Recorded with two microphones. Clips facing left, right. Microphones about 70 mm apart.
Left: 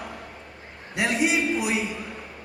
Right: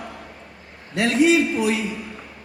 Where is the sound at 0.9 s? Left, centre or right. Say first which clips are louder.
Right 6 dB; centre.